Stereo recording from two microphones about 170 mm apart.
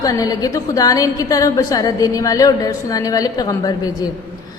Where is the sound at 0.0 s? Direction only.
20° left (ahead or behind).